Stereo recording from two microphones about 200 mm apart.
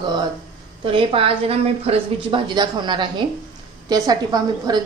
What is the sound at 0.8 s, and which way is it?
A woman's voice, 25° right (ahead or behind).